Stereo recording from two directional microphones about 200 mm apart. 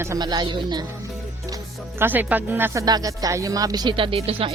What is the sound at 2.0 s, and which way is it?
Speech, 10° right (ahead or behind).